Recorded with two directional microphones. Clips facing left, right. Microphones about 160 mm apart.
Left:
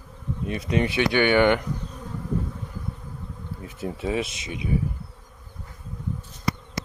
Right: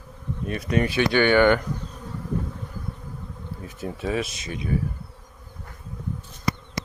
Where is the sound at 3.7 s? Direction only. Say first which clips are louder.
Even; 20° left (ahead or behind).